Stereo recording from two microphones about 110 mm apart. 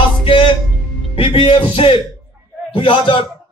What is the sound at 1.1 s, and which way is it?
Speech, 55° left (ahead or behind).